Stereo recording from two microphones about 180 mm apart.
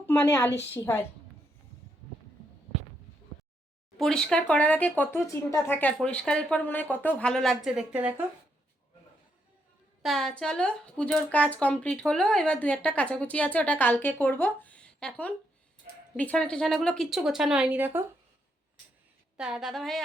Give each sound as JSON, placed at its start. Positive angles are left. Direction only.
{"t": 0.0, "sound": "a woman's voice", "side_deg": 10}
{"t": 3.9, "sound": "speech", "side_deg": 0}
{"t": 10.0, "sound": "speech", "side_deg": 0}
{"t": 19.4, "sound": "speech", "side_deg": -5}